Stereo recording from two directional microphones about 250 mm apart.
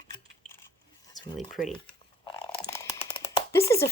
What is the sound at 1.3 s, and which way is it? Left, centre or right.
Speech, centre.